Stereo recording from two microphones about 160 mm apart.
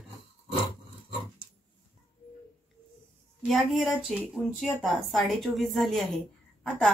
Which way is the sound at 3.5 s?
Centre (ahead or behind).